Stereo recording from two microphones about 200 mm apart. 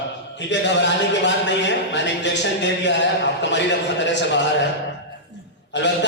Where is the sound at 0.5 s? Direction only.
65° left (ahead or behind).